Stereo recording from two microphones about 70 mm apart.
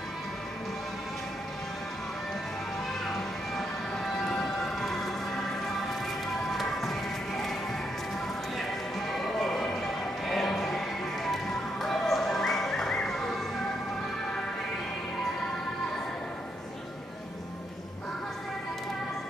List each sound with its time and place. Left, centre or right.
3.1 s music: centre
6.5 s music: centre
9.1 s music: centre
11.8 s a sound: centre